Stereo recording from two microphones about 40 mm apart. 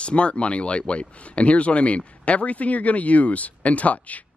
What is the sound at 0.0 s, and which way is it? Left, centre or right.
A man's voice, left.